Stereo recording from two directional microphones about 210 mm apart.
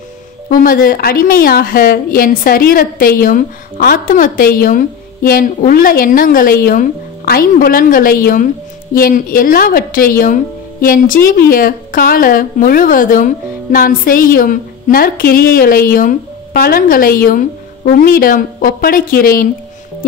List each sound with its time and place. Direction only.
0.6 s a woman's voice: 40° left (ahead or behind)